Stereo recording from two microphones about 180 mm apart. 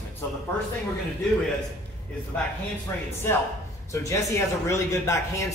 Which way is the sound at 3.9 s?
15° left (ahead or behind).